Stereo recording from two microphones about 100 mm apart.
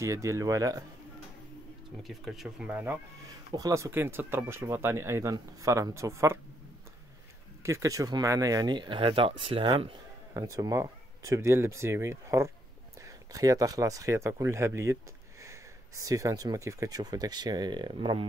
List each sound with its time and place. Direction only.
0.0 s speech: 30° right (ahead or behind)
2.0 s speech: centre (ahead or behind)
2.7 s speech: 20° right (ahead or behind)
3.5 s speech: 35° right (ahead or behind)
7.6 s speech: 30° right (ahead or behind); by 9.9 s 65° right (ahead or behind)
10.3 s speech: 35° right (ahead or behind); by 18.2 s 55° right (ahead or behind)